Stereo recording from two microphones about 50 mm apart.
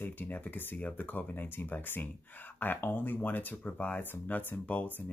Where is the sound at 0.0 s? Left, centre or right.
Left.